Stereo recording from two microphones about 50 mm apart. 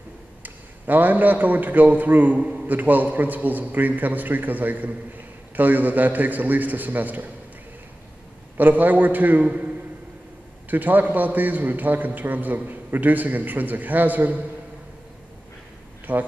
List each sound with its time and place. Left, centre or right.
0.4 s a man's voice: right
8.5 s a man's voice: right
10.7 s a man's voice: right
16.1 s a man's voice: right